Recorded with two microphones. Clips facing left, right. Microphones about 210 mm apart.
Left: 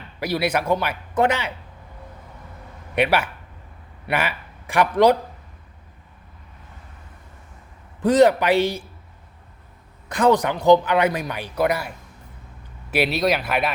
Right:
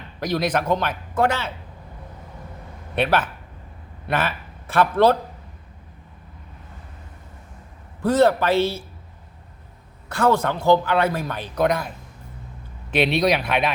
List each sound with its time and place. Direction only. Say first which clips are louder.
0.2 s a man's voice: even; 10° left (ahead or behind)
2.9 s a man's voice: left 1 dB; 10° left (ahead or behind)
8.0 s a man's voice: left 2 dB; 15° left (ahead or behind)
10.1 s a man's voice: left 2 dB; 15° left (ahead or behind)
12.9 s speech: right 1 dB; 5° left (ahead or behind)